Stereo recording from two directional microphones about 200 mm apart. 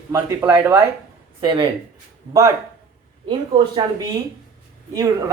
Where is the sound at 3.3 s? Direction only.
25° right (ahead or behind).